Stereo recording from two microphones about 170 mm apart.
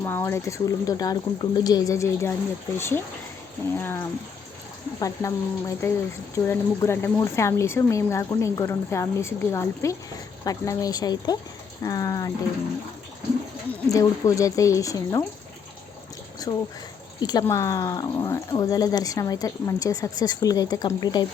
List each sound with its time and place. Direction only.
0.0 s speech: 15° left (ahead or behind)
13.8 s speech: 20° left (ahead or behind)
16.4 s speech: 20° left (ahead or behind)